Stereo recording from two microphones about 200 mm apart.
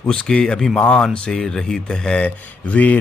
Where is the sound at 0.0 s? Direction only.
5° left (ahead or behind).